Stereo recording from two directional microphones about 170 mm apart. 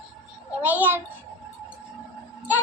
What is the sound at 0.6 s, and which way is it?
Speech, 10° right (ahead or behind).